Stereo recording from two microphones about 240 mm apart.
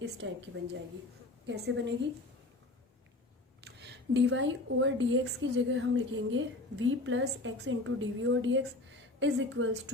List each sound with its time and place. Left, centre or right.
0.2 s a woman's voice: right
1.5 s a woman's voice: right
3.8 s a woman's voice: right